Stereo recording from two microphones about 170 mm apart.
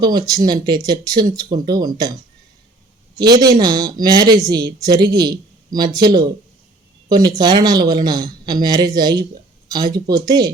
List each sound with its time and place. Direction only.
0.0 s speech: 25° right (ahead or behind)
3.2 s speech: 20° right (ahead or behind)